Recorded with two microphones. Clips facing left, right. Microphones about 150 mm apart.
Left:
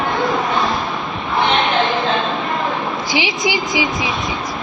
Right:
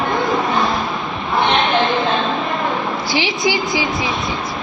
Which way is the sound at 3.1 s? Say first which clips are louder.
Right 1 dB; 15° left (ahead or behind).